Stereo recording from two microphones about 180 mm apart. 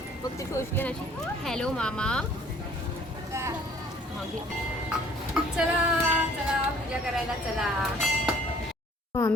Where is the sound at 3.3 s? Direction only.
15° right (ahead or behind).